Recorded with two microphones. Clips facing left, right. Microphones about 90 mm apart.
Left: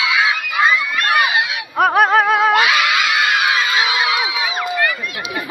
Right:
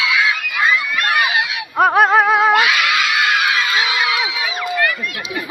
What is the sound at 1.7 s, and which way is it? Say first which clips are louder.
Music: right 1 dB; centre (ahead or behind).